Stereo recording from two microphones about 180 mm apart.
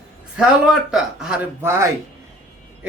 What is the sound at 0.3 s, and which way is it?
Speech, 5° right (ahead or behind).